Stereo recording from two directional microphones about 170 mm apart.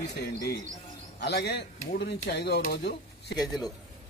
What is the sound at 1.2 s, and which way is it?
A man's voice, 75° left (ahead or behind).